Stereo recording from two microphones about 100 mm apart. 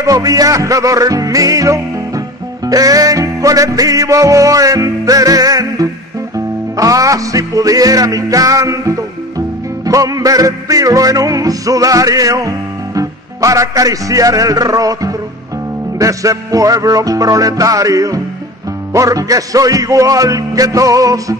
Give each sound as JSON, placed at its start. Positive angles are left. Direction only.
{"t": 0.0, "sound": "music", "side_deg": -35}